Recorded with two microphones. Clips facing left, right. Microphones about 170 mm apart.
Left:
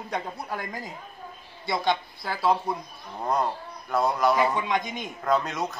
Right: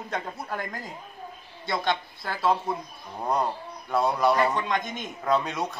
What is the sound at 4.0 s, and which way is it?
Speech, 5° left (ahead or behind).